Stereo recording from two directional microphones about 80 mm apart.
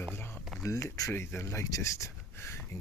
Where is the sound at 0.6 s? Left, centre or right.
Left.